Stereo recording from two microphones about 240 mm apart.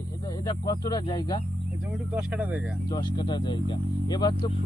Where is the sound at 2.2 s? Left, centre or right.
Centre.